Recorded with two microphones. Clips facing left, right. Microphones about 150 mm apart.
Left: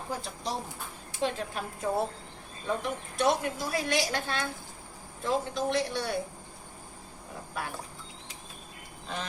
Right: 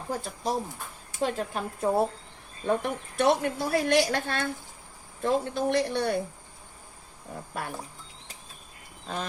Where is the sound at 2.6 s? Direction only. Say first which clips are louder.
Right 5 dB; 60° right (ahead or behind).